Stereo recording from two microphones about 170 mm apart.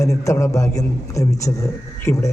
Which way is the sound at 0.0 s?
20° left (ahead or behind).